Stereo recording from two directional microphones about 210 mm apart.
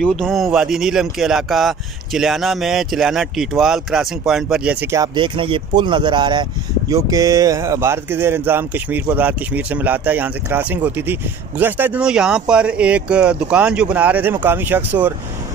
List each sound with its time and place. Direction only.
0.0 s speech: centre (ahead or behind)